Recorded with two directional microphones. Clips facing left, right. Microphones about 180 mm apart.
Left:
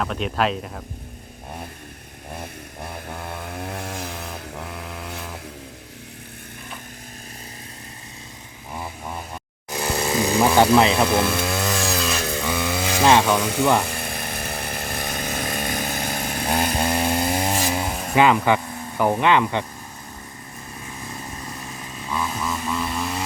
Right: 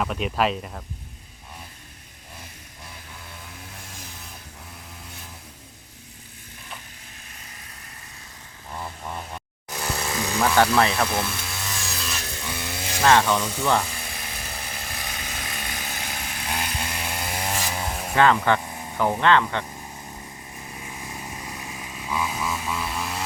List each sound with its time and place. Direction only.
0.0 s speech: 5° right (ahead or behind)
2.3 s chainsaw: 55° left (ahead or behind); by 5.4 s 75° left (ahead or behind)
8.7 s chainsaw: 10° left (ahead or behind)
9.8 s chainsaw: 25° left (ahead or behind)
10.4 s speech: 15° left (ahead or behind)
11.1 s chainsaw: 80° left
13.1 s speech: 15° left (ahead or behind)
13.4 s speech: 75° left (ahead or behind)
13.8 s chainsaw: 60° left (ahead or behind); by 17.8 s 25° left (ahead or behind)
17.8 s a sound: centre (ahead or behind)
18.1 s speech: 10° left (ahead or behind)
20.7 s motorcycle: 15° right (ahead or behind)